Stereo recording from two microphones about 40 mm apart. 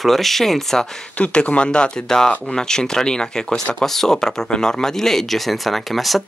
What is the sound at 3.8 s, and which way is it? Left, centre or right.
Speech, centre.